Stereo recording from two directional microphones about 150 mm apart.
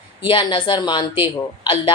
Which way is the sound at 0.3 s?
30° left (ahead or behind).